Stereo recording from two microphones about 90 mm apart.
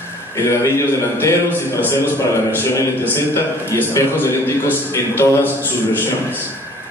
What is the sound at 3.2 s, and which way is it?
A man's voice, 25° left (ahead or behind).